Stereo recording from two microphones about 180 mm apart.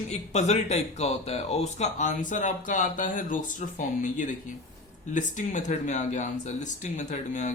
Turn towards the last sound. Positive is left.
turn(degrees=45)  # may be behind; listen again after turning